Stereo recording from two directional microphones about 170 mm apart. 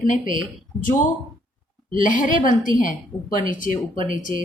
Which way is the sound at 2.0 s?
50° left (ahead or behind).